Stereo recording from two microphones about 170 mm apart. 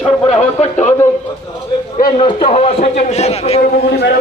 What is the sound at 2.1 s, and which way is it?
A man's voice, 35° left (ahead or behind).